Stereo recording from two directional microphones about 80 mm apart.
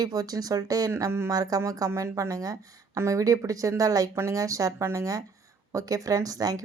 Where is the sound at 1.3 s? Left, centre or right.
Right.